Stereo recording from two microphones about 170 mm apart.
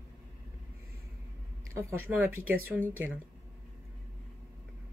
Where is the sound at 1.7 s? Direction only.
15° right (ahead or behind).